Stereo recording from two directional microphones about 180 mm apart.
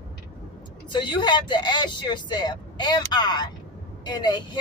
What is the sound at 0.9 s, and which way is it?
Speech, 25° left (ahead or behind).